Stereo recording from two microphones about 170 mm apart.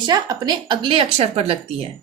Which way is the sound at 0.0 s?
25° right (ahead or behind).